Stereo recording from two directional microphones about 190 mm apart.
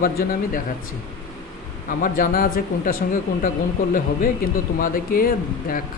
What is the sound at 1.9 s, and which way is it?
Speech, 45° left (ahead or behind).